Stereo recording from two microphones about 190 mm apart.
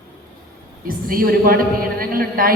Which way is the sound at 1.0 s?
50° right (ahead or behind).